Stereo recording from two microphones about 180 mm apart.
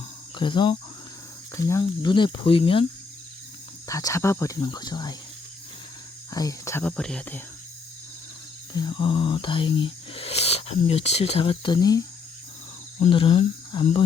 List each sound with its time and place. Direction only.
0.3 s speech: 25° left (ahead or behind)
1.5 s speech: 15° left (ahead or behind)
3.8 s speech: 20° left (ahead or behind)
6.3 s speech: 20° left (ahead or behind)
8.7 s speech: 25° left (ahead or behind)